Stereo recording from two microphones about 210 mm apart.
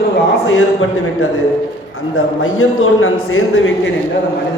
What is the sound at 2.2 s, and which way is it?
A man's voice, 75° left (ahead or behind).